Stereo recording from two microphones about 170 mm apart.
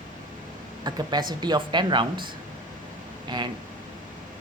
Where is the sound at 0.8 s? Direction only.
25° right (ahead or behind).